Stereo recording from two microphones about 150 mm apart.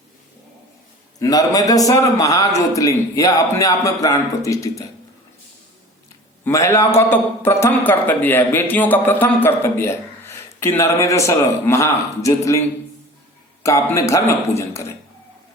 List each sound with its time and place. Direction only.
1.2 s a man's voice: 25° left (ahead or behind)
6.4 s a man's voice: 20° left (ahead or behind)